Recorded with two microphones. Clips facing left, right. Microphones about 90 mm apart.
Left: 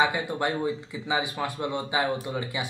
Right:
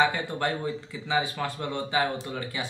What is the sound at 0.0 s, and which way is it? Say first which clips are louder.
A man's voice: even; 15° left (ahead or behind).